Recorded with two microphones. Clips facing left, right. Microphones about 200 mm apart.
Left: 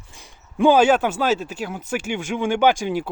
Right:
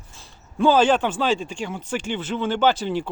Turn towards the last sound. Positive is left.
turn(degrees=10)  # may be behind; listen again after turning